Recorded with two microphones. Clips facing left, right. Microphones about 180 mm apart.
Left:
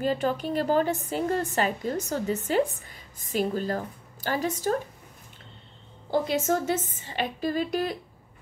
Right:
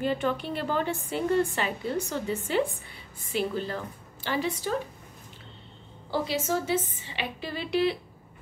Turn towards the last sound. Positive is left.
turn(degrees=45)  # may be behind; listen again after turning